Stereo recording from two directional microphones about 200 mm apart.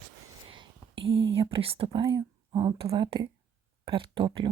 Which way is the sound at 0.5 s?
25° right (ahead or behind).